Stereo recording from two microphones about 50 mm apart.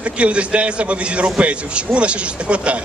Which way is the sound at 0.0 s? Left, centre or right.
Right.